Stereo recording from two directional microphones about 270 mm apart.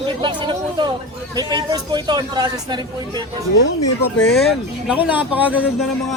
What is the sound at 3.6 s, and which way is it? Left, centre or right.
Speech, left.